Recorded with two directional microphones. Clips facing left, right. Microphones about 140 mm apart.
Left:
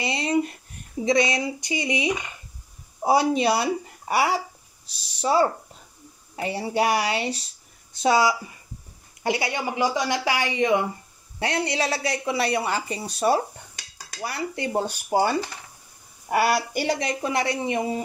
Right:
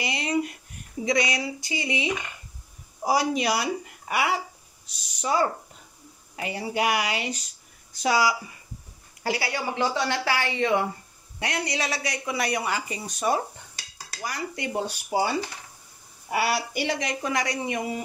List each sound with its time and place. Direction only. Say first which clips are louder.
0.0 s a sound: left 3 dB; 25° left (ahead or behind)
1.0 s a woman's voice: left 4 dB; 25° left (ahead or behind)
11.3 s a woman's voice: left 4 dB; 30° left (ahead or behind)